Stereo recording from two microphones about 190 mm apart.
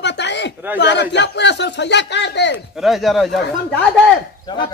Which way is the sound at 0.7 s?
65° left (ahead or behind).